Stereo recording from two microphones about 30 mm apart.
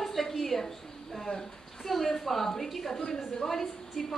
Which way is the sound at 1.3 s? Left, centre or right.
Left.